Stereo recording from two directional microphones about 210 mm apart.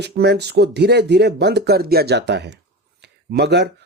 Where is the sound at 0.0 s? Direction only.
55° right (ahead or behind).